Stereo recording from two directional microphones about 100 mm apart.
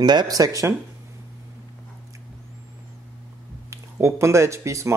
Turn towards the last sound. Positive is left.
turn(degrees=-30)  # may be behind; listen again after turning